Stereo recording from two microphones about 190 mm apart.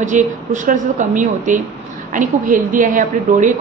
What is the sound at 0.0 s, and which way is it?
A woman's voice, 40° right (ahead or behind).